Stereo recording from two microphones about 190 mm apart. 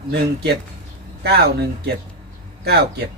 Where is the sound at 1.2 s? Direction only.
55° right (ahead or behind).